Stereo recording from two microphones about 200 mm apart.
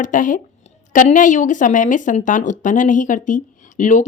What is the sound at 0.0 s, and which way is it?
Speech, 40° left (ahead or behind).